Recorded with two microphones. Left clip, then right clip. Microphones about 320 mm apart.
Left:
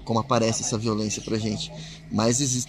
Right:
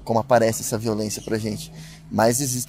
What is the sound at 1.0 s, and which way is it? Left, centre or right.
Speech, right.